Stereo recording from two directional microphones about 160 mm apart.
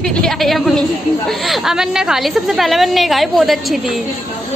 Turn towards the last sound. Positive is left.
turn(degrees=0)  # may be behind; listen again after turning